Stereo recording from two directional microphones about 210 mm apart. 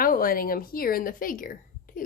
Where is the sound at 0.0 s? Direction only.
45° left (ahead or behind).